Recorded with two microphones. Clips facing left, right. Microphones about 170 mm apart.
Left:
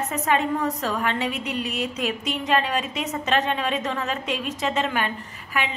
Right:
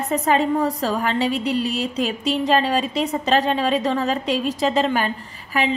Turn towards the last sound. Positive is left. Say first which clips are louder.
# right 5 dB
turn(degrees=-35)  # may be behind; listen again after turning